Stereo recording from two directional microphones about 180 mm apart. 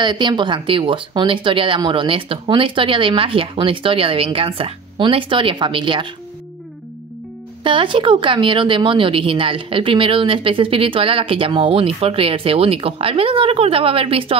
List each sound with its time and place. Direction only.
0.0 s speech: 25° right (ahead or behind)
7.6 s speech: 30° right (ahead or behind)